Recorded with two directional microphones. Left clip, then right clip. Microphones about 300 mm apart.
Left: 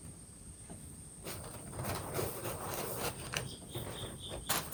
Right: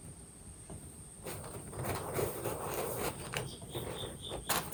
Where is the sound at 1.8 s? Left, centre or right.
Centre.